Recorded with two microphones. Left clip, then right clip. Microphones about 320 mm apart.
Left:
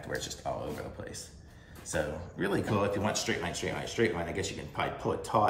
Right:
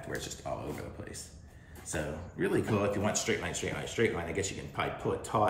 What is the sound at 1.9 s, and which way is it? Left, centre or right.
Speech, centre.